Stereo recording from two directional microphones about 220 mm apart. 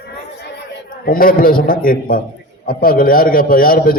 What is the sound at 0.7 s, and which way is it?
A man's voice, 40° left (ahead or behind).